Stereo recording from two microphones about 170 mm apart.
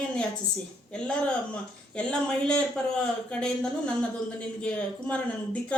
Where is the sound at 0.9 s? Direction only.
5° left (ahead or behind).